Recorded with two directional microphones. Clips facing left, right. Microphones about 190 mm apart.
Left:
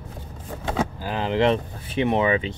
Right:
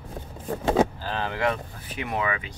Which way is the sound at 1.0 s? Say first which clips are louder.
Left 6 dB; 15° left (ahead or behind).